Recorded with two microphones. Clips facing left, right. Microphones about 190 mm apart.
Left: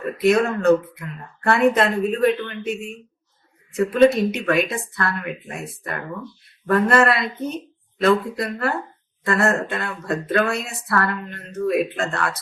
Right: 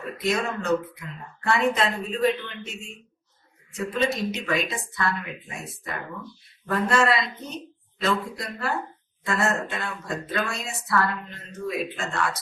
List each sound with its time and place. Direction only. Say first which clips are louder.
0.0 s speech: left 9 dB; 60° left (ahead or behind)
6.7 s speech: left 5 dB; 60° left (ahead or behind)